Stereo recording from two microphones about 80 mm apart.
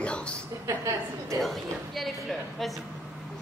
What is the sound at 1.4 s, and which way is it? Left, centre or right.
A woman's voice, centre.